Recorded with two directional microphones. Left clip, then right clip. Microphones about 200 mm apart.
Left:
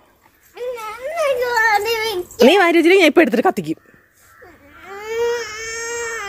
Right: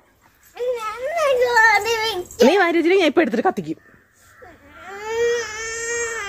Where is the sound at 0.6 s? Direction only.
Centre (ahead or behind).